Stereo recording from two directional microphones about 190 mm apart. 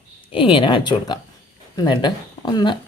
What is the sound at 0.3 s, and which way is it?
Speech, 30° left (ahead or behind).